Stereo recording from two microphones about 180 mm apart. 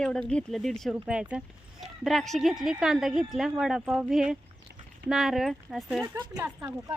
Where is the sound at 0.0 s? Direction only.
5° left (ahead or behind).